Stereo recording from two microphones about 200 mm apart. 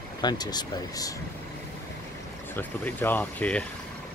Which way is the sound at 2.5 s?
10° left (ahead or behind).